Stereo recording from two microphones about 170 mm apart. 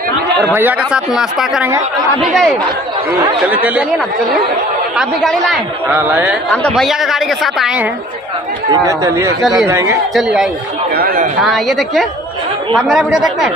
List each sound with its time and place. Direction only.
0.6 s speech: 5° right (ahead or behind)
4.9 s speech: centre (ahead or behind)
5.9 s a man's voice: 10° right (ahead or behind)
8.7 s a man's voice: 20° right (ahead or behind)
10.1 s speech: 5° right (ahead or behind)
11.0 s speech: 60° right (ahead or behind)
11.4 s speech: centre (ahead or behind)